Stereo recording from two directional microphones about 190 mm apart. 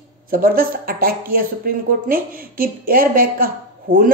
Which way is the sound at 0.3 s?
50° right (ahead or behind).